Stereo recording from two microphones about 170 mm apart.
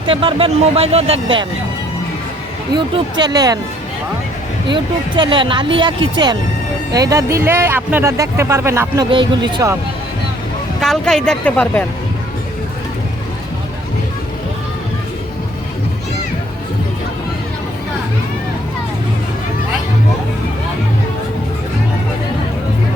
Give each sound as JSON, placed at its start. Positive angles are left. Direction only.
{"t": 0.0, "sound": "speech", "side_deg": -30}
{"t": 2.7, "sound": "speech", "side_deg": -25}
{"t": 4.7, "sound": "speech", "side_deg": -25}
{"t": 9.0, "sound": "speech", "side_deg": -30}
{"t": 10.8, "sound": "speech", "side_deg": 0}